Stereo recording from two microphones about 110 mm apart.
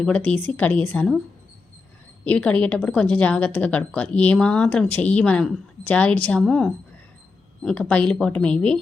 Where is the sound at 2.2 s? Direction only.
10° left (ahead or behind).